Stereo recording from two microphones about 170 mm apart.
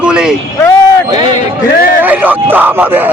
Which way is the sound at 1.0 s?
25° right (ahead or behind).